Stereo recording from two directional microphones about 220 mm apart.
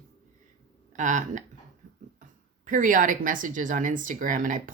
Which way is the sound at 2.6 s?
35° right (ahead or behind).